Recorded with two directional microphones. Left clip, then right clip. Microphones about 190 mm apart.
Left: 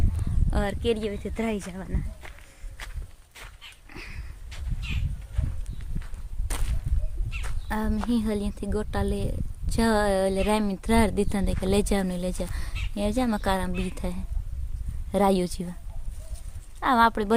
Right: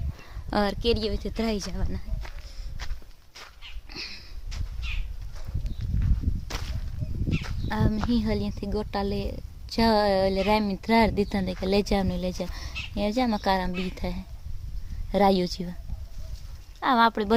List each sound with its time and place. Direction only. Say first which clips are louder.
0.5 s speech: right 4 dB; 30° right (ahead or behind)
0.8 s speech: right 1 dB; 10° right (ahead or behind)
1.7 s speech: even; 5° right (ahead or behind)
3.8 s dog: right 6 dB; centre (ahead or behind)
7.4 s speech: left 1 dB; centre (ahead or behind)
16.8 s speech: left 1 dB; centre (ahead or behind)